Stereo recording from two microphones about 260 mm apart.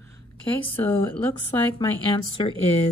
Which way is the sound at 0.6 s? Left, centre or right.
Centre.